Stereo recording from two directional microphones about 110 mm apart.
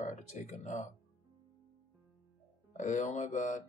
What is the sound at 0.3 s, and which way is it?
Speech, 90° left.